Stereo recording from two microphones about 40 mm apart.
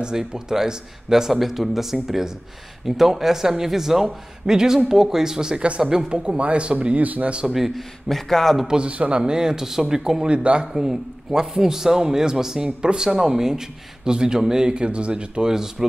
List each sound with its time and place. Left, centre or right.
0.0 s a man's voice: centre
7.0 s speech: right
7.4 s a man's voice: centre
8.1 s speech: centre
8.6 s speech: right
9.2 s a man's voice: centre
10.2 s speech: right
10.8 s a man's voice: centre